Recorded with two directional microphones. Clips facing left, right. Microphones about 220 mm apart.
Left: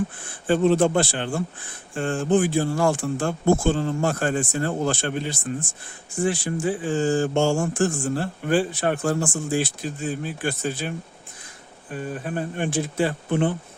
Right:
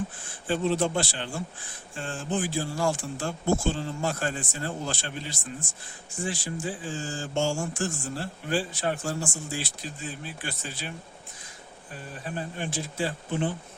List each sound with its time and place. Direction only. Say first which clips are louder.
0.4 s speech: left 7 dB; 55° left (ahead or behind)